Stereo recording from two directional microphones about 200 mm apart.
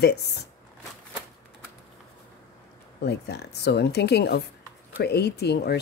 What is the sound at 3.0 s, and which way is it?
Speech, 55° left (ahead or behind).